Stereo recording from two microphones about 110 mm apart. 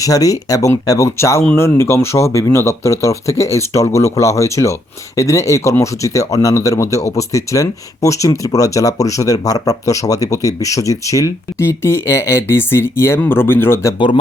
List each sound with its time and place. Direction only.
0.0 s speech: 30° left (ahead or behind)